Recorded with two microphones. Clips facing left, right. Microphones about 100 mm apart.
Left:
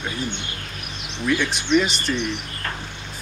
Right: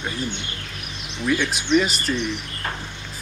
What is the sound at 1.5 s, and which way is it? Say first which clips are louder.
Speech: even; centre (ahead or behind).